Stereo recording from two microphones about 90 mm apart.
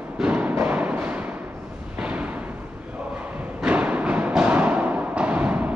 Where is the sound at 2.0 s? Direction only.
15° right (ahead or behind).